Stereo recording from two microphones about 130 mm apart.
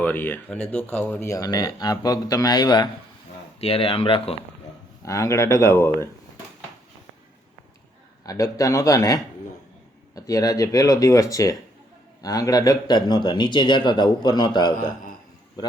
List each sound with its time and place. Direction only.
0.0 s speech: 15° left (ahead or behind); by 2.9 s 30° left (ahead or behind)
3.6 s speech: 45° left (ahead or behind)
5.0 s speech: 25° left (ahead or behind)
8.2 s a man's voice: 25° left (ahead or behind)